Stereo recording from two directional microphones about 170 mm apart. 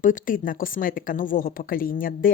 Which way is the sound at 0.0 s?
50° left (ahead or behind).